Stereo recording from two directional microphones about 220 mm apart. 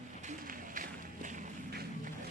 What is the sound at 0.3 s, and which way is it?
Run, 40° right (ahead or behind).